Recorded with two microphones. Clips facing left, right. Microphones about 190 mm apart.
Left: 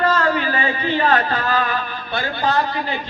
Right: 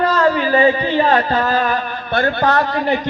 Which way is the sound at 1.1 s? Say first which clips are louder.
Right 3 dB; 40° right (ahead or behind).